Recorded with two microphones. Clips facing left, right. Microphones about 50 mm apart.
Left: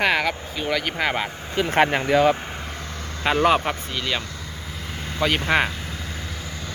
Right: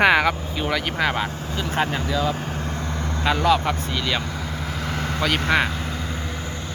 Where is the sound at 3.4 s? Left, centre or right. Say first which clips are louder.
Left 1 dB; left.